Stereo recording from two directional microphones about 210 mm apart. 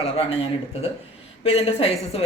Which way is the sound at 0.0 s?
30° left (ahead or behind).